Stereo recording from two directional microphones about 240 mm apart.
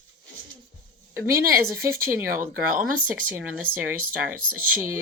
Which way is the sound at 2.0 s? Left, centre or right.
Centre.